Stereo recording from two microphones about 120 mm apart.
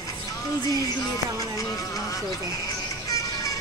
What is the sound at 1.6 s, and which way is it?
Music, 30° left (ahead or behind).